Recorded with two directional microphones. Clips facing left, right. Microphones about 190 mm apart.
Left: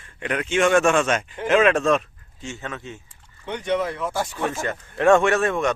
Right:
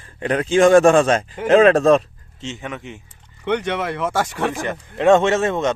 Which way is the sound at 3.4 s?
75° right (ahead or behind).